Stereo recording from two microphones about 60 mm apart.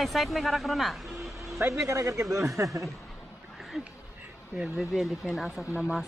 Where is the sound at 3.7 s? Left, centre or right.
Centre.